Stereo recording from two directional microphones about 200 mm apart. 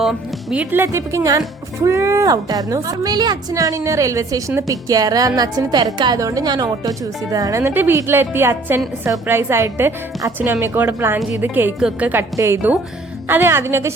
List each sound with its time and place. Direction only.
0.0 s speech: 5° right (ahead or behind)